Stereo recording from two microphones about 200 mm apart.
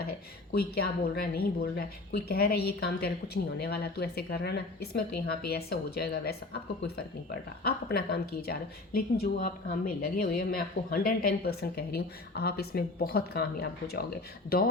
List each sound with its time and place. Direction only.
0.5 s speech: 50° left (ahead or behind)